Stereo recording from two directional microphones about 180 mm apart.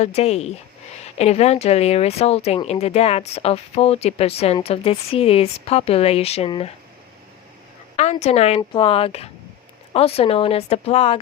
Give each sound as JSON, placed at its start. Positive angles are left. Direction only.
{"t": 0.0, "sound": "speech", "side_deg": 35}
{"t": 7.9, "sound": "speech", "side_deg": 35}